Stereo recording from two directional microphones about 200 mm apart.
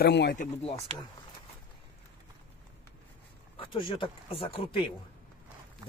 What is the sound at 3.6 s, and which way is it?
Speech, 25° left (ahead or behind).